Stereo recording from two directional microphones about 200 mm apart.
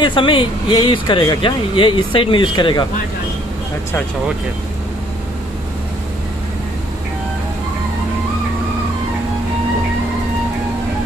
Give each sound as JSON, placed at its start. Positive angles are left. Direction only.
{"t": 0.0, "sound": "speech", "side_deg": 25}